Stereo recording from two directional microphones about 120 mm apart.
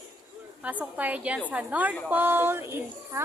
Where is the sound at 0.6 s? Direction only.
10° right (ahead or behind).